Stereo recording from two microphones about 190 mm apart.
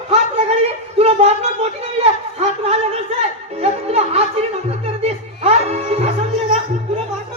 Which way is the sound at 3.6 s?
35° right (ahead or behind).